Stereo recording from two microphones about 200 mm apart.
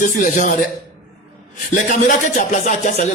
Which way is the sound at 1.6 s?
45° left (ahead or behind).